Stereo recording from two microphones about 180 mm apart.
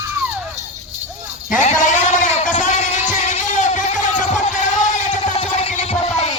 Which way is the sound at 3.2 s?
45° left (ahead or behind).